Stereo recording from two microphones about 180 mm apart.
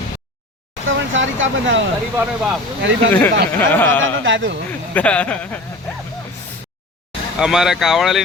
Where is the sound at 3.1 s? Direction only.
10° left (ahead or behind).